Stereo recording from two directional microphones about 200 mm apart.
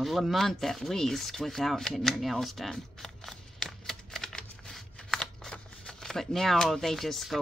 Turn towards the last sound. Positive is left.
turn(degrees=0)  # may be behind; listen again after turning